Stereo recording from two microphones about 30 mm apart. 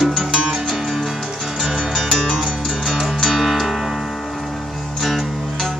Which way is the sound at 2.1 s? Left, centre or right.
Centre.